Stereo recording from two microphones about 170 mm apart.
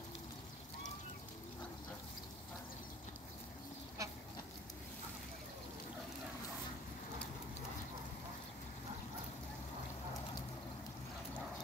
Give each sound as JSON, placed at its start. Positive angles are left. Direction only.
{"t": 4.0, "sound": "duck", "side_deg": -20}